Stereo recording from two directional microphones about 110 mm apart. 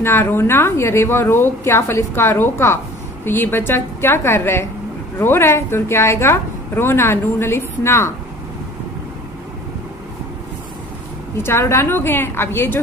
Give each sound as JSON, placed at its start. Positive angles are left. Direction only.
{"t": 0.0, "sound": "a woman's voice", "side_deg": 20}
{"t": 11.3, "sound": "a woman's voice", "side_deg": 20}